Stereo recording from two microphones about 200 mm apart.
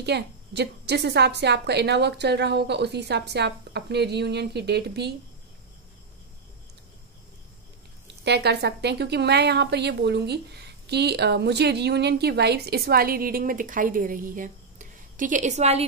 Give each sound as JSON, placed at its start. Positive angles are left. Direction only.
{"t": 0.0, "sound": "a woman's voice", "side_deg": -55}
{"t": 8.2, "sound": "a woman's voice", "side_deg": -55}